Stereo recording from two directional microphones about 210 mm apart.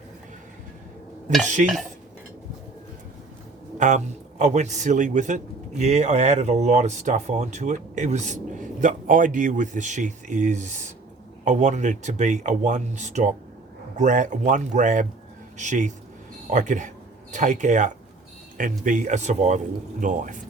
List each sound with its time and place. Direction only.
1.6 s speech: centre (ahead or behind)
3.8 s a man's voice: 35° right (ahead or behind)